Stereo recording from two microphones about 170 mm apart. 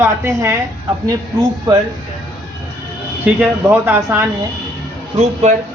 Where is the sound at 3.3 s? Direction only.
10° right (ahead or behind).